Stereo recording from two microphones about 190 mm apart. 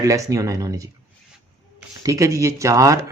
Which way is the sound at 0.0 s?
15° right (ahead or behind).